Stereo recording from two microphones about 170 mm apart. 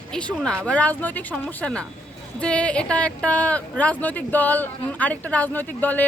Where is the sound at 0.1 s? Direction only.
5° left (ahead or behind).